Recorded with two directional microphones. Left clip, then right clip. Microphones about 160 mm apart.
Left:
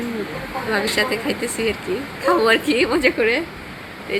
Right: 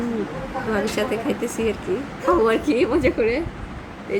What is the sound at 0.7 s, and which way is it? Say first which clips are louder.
A woman's voice: left 3 dB; 15° right (ahead or behind).